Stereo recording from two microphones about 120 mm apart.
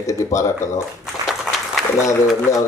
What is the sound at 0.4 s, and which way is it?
Speech, 25° left (ahead or behind).